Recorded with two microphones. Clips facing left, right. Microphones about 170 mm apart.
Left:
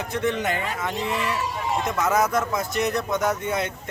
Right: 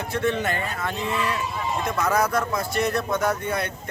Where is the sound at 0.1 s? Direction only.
15° left (ahead or behind).